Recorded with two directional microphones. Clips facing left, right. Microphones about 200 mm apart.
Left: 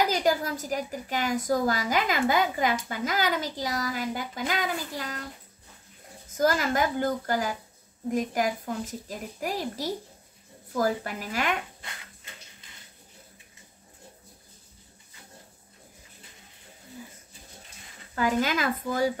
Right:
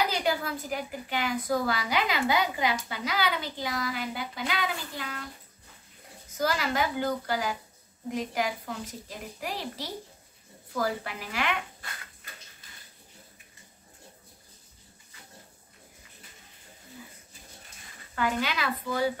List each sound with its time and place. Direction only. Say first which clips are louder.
0.1 s a woman's voice: left 4 dB; 40° left (ahead or behind)
6.3 s a woman's voice: left 4 dB; 45° left (ahead or behind)
18.1 s a woman's voice: left 4 dB; 40° left (ahead or behind)